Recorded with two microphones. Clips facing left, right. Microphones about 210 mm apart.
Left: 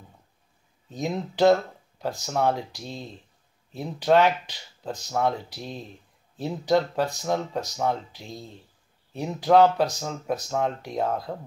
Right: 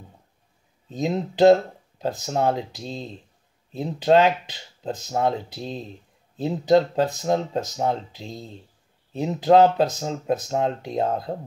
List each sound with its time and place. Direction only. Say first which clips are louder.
0.9 s speech: right 4 dB; 20° right (ahead or behind)